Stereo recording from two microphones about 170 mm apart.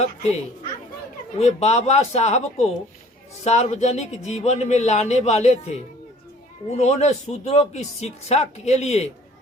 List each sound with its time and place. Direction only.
1.4 s speech: 40° left (ahead or behind)